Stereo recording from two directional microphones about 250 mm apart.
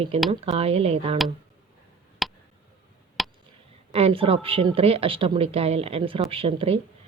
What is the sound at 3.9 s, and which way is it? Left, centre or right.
A woman's voice, right.